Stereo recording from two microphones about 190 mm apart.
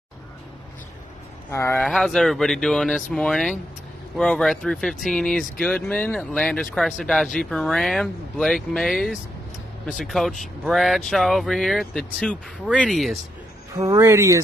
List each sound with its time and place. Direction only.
1.5 s speech: 10° left (ahead or behind)
1.9 s speech: centre (ahead or behind)
13.7 s speech: 15° right (ahead or behind)